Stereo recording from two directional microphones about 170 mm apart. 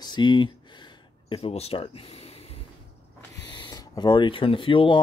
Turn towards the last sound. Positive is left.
turn(degrees=30)  # may be behind; listen again after turning